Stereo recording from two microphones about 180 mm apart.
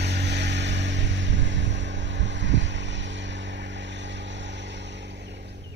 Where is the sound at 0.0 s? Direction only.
70° right (ahead or behind).